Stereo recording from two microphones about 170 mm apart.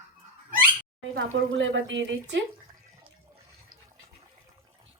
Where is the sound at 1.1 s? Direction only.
90° right.